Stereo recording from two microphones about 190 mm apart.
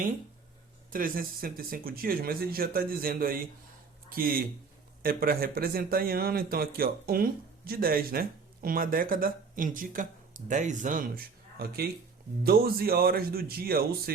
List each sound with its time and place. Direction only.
0.9 s a man's voice: 50° right (ahead or behind)